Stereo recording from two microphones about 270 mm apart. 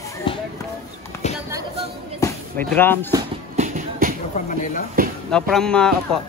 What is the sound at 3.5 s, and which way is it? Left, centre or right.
Music, right.